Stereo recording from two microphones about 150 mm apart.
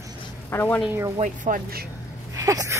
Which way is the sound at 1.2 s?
60° right (ahead or behind).